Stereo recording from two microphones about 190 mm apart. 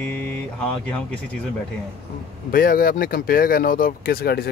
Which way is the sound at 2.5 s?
50° left (ahead or behind).